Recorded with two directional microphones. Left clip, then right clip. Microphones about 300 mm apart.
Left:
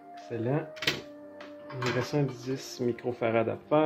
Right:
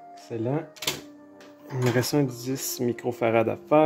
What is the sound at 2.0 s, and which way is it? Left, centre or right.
Speech, right.